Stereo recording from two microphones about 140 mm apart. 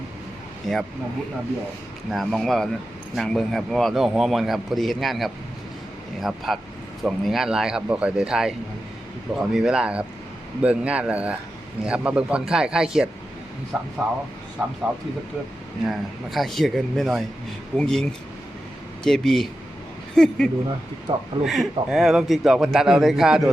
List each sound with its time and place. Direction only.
0.7 s a man's voice: centre (ahead or behind)
2.0 s a man's voice: centre (ahead or behind)
14.6 s speech: 15° right (ahead or behind)
15.9 s a man's voice: centre (ahead or behind)
21.1 s speech: 40° right (ahead or behind)
21.4 s a man's voice: centre (ahead or behind)